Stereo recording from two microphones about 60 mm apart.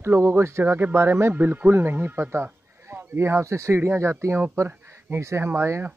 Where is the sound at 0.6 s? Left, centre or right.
Right.